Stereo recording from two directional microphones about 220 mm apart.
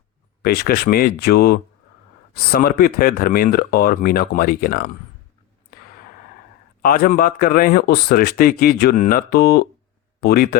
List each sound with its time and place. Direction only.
0.4 s speech: 45° left (ahead or behind)
6.8 s a man's voice: 40° left (ahead or behind)